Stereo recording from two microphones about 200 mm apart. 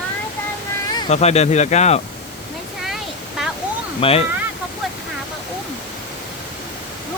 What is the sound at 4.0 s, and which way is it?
Speech, 30° left (ahead or behind).